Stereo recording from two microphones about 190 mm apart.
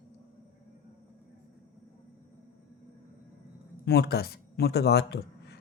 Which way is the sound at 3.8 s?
60° left (ahead or behind).